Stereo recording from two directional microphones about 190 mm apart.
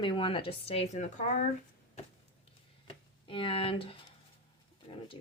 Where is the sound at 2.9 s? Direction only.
25° left (ahead or behind).